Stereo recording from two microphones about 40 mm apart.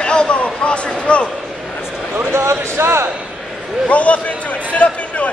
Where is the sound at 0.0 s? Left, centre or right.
Left.